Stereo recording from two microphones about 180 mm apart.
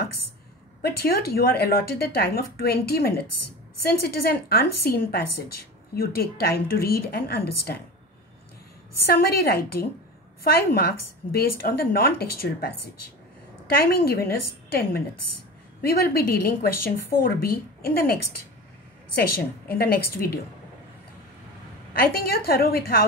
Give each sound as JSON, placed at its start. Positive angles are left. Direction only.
{"t": 0.8, "sound": "speech", "side_deg": 60}
{"t": 9.0, "sound": "speech", "side_deg": 60}
{"t": 13.8, "sound": "speech", "side_deg": 60}
{"t": 19.7, "sound": "speech", "side_deg": 60}
{"t": 21.9, "sound": "speech", "side_deg": 55}